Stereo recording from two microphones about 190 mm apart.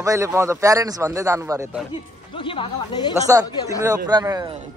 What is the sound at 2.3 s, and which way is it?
Speech, 25° left (ahead or behind).